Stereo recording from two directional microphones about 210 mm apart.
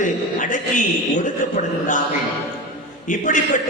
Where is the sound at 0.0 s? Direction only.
35° left (ahead or behind).